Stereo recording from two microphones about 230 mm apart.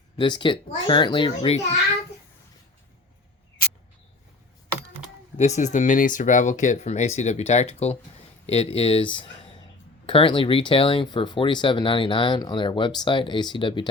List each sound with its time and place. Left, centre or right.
0.2 s speech: left
5.4 s speech: left